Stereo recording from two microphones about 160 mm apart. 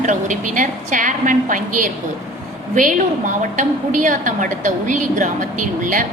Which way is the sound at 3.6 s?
55° right (ahead or behind).